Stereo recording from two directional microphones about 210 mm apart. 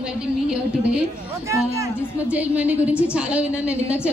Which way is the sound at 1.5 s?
15° right (ahead or behind).